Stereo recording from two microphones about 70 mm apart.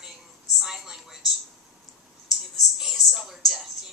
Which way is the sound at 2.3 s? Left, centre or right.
Centre.